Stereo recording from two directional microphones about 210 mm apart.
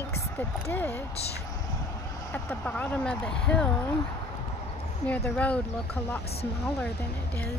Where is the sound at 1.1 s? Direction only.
30° left (ahead or behind).